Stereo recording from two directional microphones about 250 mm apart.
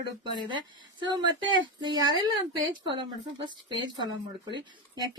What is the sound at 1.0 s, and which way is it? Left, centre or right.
Speech, centre.